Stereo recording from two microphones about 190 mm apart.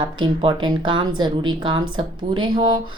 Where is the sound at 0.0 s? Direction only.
25° right (ahead or behind).